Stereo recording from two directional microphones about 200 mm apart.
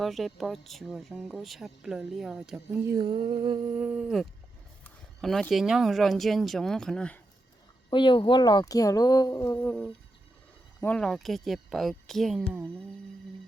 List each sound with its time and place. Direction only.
0.0 s speech: centre (ahead or behind)
3.0 s music: 25° right (ahead or behind)
3.8 s speech: 5° right (ahead or behind)
7.9 s speech: 25° left (ahead or behind); by 12.6 s centre (ahead or behind)